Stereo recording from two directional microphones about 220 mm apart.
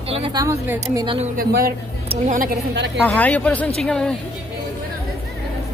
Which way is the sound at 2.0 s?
30° right (ahead or behind).